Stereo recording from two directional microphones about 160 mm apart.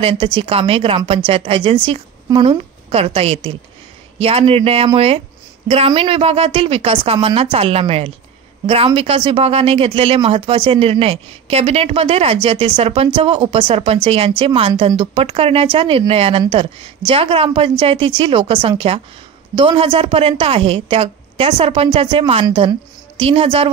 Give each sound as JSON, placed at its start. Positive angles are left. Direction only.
{"t": 0.0, "sound": "a woman's voice", "side_deg": -35}